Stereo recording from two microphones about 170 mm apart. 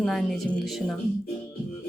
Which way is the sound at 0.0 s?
Centre (ahead or behind).